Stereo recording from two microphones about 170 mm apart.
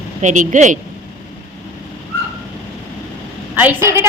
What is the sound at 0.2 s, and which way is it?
Speech, 45° right (ahead or behind).